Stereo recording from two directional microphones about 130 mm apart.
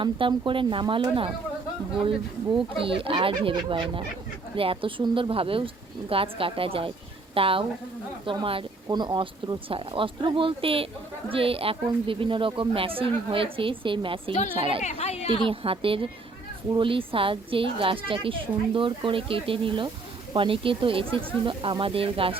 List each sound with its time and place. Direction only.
0.0 s a woman's voice: 40° right (ahead or behind)
14.8 s a woman's voice: 60° left (ahead or behind)
15.3 s a woman's voice: 45° right (ahead or behind)